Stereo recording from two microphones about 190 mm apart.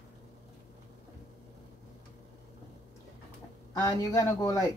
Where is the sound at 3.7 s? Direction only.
15° left (ahead or behind).